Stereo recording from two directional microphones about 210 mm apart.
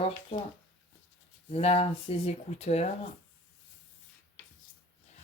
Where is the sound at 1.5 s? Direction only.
30° left (ahead or behind).